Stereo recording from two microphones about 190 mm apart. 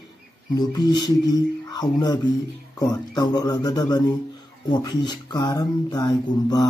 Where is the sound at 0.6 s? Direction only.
20° left (ahead or behind).